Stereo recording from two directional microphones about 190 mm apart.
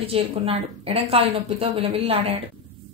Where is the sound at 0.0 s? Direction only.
30° right (ahead or behind).